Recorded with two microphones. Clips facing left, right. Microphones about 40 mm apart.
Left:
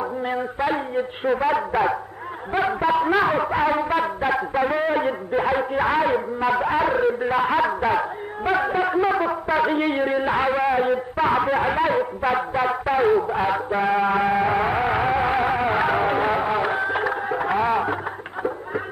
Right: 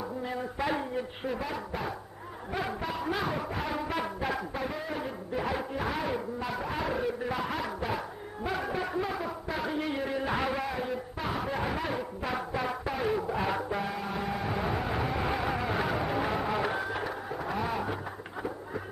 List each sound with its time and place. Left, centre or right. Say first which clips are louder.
0.2 s a sound: left 9 dB; left
0.6 s speech: left 7 dB; left
1.2 s a man's voice: left 13 dB; left
2.5 s a man's voice: left 13 dB; left
10.1 s a man's voice: left 10 dB; left
13.3 s music: left 8 dB; left
13.7 s a man's voice: left 13 dB; left
14.0 s music: left 13 dB; left
16.9 s music: left 11 dB; left
17.6 s music: left 10 dB; left